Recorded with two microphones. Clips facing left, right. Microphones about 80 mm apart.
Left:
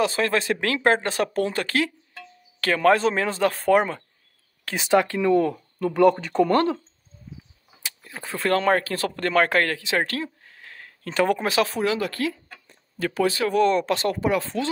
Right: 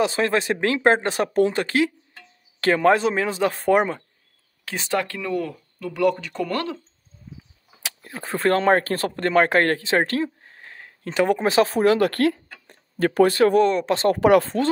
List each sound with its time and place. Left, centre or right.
0.0 s speech: right
4.7 s speech: centre; by 6.8 s left
8.0 s speech: right
9.1 s speech: right
9.7 s speech: right
11.7 s speech: right
13.8 s speech: right
14.4 s speech: right